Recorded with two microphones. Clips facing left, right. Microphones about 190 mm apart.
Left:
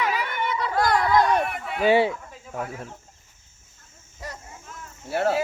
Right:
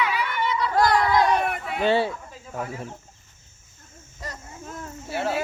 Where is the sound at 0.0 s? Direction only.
45° left (ahead or behind).